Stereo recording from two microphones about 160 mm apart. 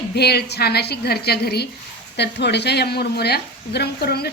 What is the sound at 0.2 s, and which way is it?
A woman's voice, 90° left.